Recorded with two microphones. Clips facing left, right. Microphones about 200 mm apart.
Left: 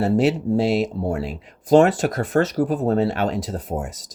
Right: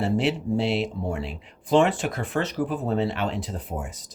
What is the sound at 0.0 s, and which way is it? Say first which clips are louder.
Speech: left 5 dB; 40° left (ahead or behind).